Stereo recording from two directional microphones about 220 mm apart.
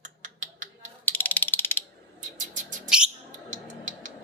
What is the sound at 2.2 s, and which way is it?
Bird, 35° right (ahead or behind).